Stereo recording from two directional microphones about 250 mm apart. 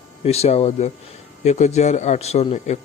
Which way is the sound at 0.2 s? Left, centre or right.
Left.